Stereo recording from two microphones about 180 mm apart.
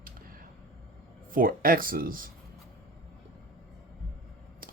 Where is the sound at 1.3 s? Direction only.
50° right (ahead or behind).